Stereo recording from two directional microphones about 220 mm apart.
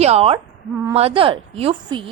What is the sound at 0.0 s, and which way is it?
A woman's voice, 25° right (ahead or behind).